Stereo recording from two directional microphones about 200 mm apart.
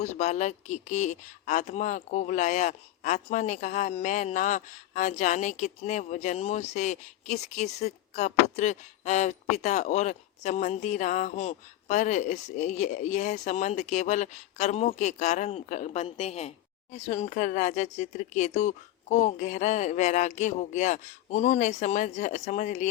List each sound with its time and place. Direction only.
0.0 s speech: 35° left (ahead or behind)